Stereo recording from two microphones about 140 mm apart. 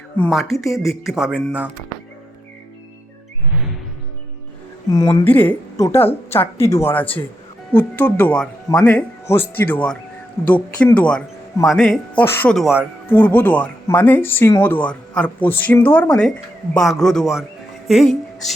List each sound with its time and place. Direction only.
0.3 s speech: centre (ahead or behind)
4.9 s a sound: 25° left (ahead or behind)
5.3 s a woman's voice: 15° left (ahead or behind)